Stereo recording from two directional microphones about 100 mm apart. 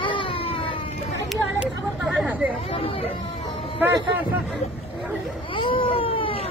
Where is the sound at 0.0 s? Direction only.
60° left (ahead or behind).